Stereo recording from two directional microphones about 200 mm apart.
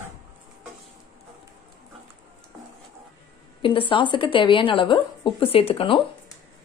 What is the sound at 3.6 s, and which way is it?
A woman's voice, 25° left (ahead or behind).